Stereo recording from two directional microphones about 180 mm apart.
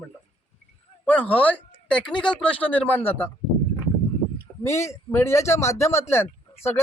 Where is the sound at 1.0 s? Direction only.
10° left (ahead or behind).